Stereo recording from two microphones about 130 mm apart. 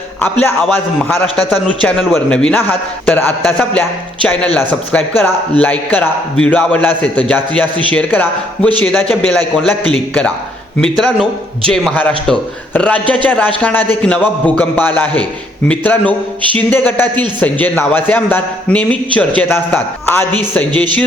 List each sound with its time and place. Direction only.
0.2 s a man's voice: 15° left (ahead or behind)